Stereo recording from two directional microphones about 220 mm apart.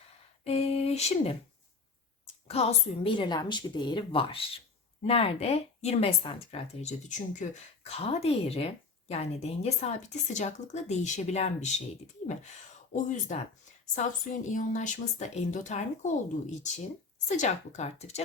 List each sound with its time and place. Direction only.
0.4 s a sound: 30° left (ahead or behind)
2.5 s speech: 25° left (ahead or behind)
12.9 s speech: 30° left (ahead or behind)
14.5 s speech: 35° left (ahead or behind)